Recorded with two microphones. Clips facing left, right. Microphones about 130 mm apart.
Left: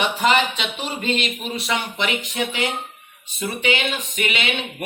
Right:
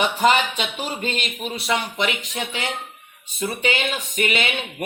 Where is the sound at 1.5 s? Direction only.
35° right (ahead or behind).